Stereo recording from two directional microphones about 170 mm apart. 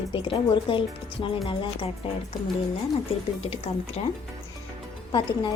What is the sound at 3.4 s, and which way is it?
Speech, 35° left (ahead or behind).